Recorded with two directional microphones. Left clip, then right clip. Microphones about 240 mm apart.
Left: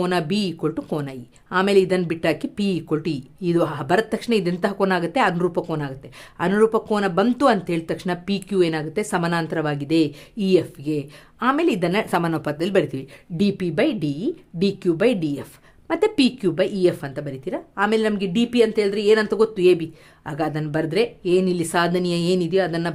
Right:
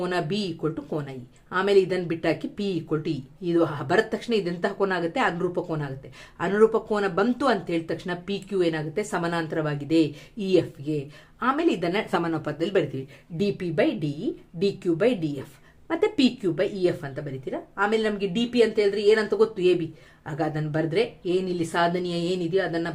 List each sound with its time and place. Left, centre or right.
0.0 s speech: left